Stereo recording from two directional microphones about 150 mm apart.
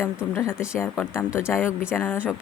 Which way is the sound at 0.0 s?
20° left (ahead or behind).